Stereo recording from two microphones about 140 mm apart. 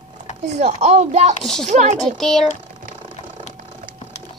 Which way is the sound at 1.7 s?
55° right (ahead or behind).